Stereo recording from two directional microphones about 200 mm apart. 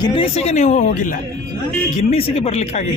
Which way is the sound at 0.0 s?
30° left (ahead or behind).